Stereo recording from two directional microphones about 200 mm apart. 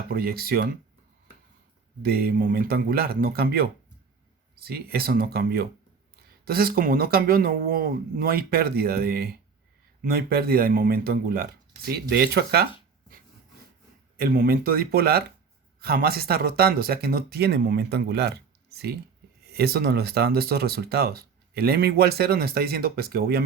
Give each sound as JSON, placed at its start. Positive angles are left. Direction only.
{"t": 0.1, "sound": "speech", "side_deg": -50}
{"t": 2.0, "sound": "speech", "side_deg": -50}
{"t": 14.2, "sound": "speech", "side_deg": -50}
{"t": 19.5, "sound": "speech", "side_deg": -50}